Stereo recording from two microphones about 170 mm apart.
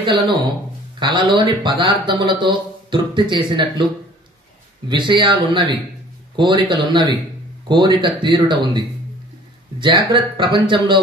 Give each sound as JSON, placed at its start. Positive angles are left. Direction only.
{"t": 0.9, "sound": "speech", "side_deg": -30}
{"t": 4.8, "sound": "speech", "side_deg": -25}